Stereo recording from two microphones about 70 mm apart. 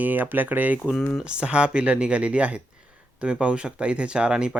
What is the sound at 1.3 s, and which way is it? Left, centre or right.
Speech, centre.